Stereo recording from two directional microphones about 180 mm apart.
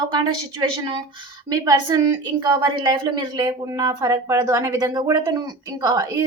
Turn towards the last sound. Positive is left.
turn(degrees=-20)  # may be behind; listen again after turning